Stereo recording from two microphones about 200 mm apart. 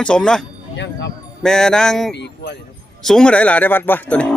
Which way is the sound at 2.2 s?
60° left (ahead or behind).